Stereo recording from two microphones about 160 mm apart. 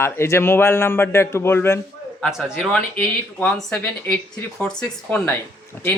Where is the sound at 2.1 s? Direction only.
Centre (ahead or behind).